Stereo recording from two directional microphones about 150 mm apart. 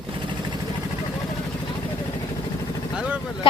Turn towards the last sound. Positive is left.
turn(degrees=-5)  # may be behind; listen again after turning